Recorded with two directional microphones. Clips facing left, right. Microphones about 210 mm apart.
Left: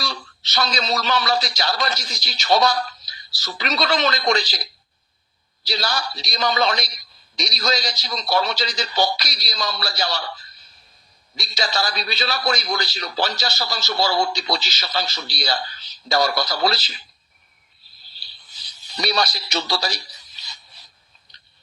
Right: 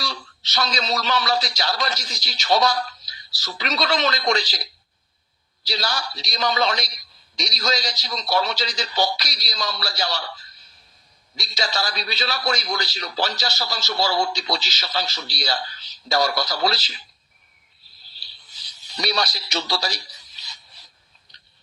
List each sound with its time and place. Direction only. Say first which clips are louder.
0.0 s a man's voice: left 1 dB; 55° left (ahead or behind)
5.6 s a man's voice: left 2 dB; 55° left (ahead or behind)
11.3 s a man's voice: left 2 dB; 55° left (ahead or behind)
18.9 s speech: left 2 dB; 55° left (ahead or behind)